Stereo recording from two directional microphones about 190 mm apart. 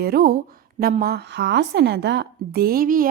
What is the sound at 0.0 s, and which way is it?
A woman's voice, 50° right (ahead or behind).